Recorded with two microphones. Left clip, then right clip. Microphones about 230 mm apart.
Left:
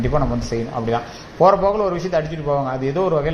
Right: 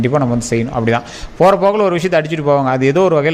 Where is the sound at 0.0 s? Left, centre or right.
Right.